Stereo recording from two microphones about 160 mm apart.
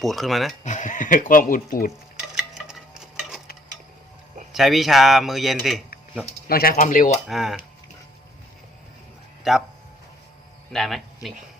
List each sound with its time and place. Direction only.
0.0 s speech: centre (ahead or behind)
0.6 s speech: 50° left (ahead or behind)
2.3 s tick-tock: 5° right (ahead or behind)
4.5 s speech: centre (ahead or behind)
6.5 s speech: 65° left (ahead or behind)
7.3 s speech: centre (ahead or behind)
9.4 s speech: centre (ahead or behind)
10.7 s speech: centre (ahead or behind)